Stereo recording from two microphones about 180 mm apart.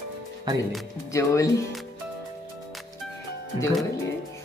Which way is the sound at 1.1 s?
15° left (ahead or behind).